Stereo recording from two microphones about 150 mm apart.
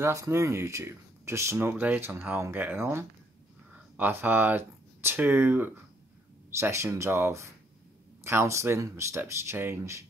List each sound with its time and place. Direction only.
0.0 s speech: 20° right (ahead or behind)